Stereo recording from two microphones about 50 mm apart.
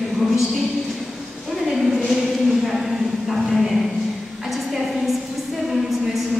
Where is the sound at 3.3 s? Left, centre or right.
Centre.